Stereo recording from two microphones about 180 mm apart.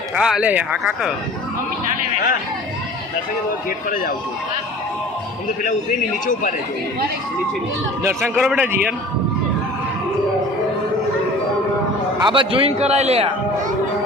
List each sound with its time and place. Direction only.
0.2 s speech: 5° right (ahead or behind)
8.0 s a man's voice: 5° right (ahead or behind)
12.2 s a man's voice: 30° right (ahead or behind)